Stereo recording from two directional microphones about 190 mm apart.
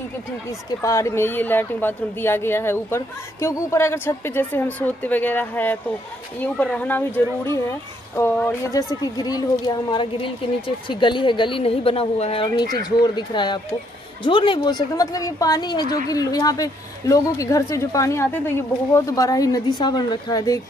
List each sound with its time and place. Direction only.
0.7 s a woman's voice: 15° left (ahead or behind)
8.2 s a woman's voice: 10° left (ahead or behind)